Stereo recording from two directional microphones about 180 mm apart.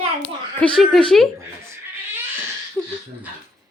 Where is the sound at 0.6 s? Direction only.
Centre (ahead or behind).